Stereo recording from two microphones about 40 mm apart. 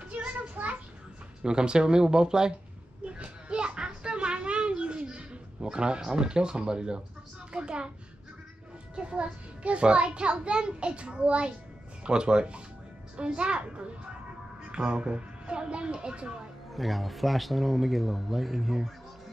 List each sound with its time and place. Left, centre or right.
0.1 s a sound: right
1.4 s a child's voice: right
3.1 s children playing: right
7.5 s a child's voice: right
8.9 s a child's voice: right
16.7 s speech: centre